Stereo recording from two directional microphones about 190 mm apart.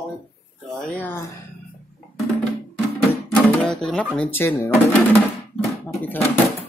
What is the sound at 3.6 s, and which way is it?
Speech, 5° left (ahead or behind).